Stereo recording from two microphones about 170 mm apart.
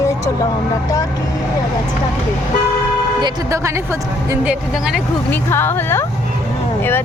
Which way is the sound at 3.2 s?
20° right (ahead or behind).